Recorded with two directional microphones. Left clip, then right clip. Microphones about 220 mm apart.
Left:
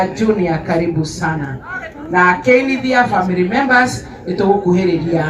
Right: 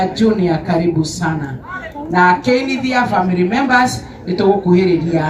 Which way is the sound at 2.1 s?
45° right (ahead or behind).